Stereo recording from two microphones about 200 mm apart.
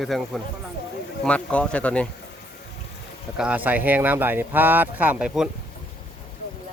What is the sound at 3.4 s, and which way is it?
Speech, 5° right (ahead or behind).